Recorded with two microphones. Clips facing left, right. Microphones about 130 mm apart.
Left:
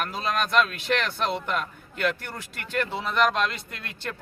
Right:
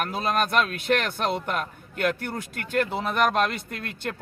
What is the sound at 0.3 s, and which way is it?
Speech, 45° right (ahead or behind).